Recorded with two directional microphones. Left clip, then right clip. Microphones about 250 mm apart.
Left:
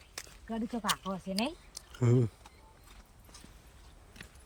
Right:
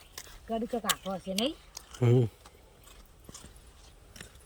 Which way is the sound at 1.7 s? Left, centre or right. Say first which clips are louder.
Right 3 dB; centre.